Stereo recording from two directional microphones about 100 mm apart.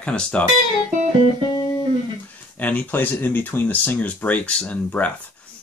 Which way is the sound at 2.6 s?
15° left (ahead or behind).